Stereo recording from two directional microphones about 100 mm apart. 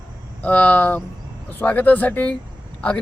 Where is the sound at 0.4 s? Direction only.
15° left (ahead or behind).